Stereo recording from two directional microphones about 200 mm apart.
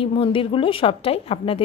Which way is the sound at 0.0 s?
25° left (ahead or behind).